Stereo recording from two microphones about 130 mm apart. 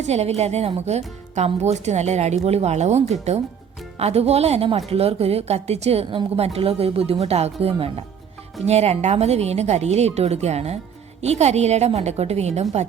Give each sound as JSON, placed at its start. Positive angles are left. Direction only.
{"t": 0.0, "sound": "a woman's voice", "side_deg": -55}